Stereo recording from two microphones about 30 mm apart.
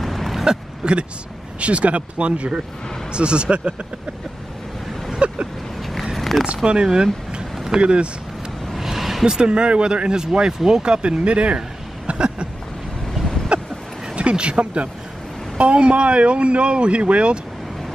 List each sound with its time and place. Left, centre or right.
0.0 s vehicle: centre
0.8 s speech: right
1.6 s speech: right
5.2 s speech: right
5.8 s vehicle: centre
6.4 s speech: right
8.7 s vehicle: centre
9.2 s speech: right
11.1 s speech: right
12.1 s a sound: right
13.5 s a sound: right
14.1 s speech: right